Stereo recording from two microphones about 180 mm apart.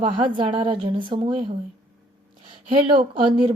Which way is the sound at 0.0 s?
25° right (ahead or behind).